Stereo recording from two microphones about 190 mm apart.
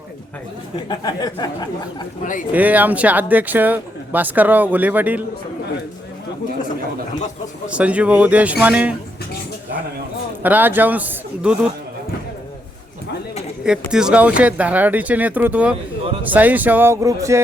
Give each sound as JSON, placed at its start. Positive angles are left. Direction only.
{"t": 0.9, "sound": "speech", "side_deg": 20}
{"t": 2.5, "sound": "speech", "side_deg": -10}
{"t": 7.7, "sound": "speech", "side_deg": -5}
{"t": 10.4, "sound": "speech", "side_deg": -10}
{"t": 13.7, "sound": "speech", "side_deg": -5}